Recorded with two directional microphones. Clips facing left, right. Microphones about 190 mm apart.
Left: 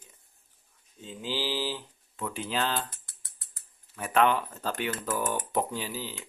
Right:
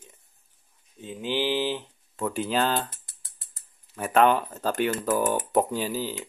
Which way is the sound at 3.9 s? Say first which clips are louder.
Right 4 dB; 45° right (ahead or behind).